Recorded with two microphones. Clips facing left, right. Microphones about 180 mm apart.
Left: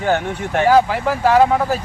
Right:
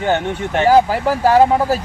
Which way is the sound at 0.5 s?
35° right (ahead or behind).